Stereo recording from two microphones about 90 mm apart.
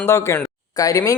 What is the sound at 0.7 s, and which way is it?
Speech, 40° left (ahead or behind).